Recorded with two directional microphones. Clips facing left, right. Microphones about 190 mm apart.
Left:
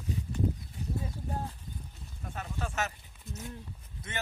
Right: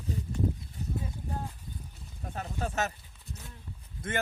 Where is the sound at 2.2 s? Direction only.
35° right (ahead or behind).